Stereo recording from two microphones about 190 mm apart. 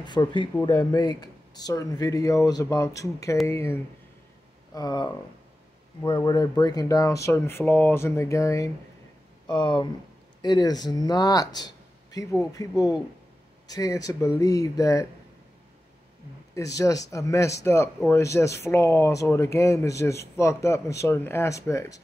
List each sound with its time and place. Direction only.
0.0 s speech: 25° left (ahead or behind)
16.5 s speech: 15° left (ahead or behind)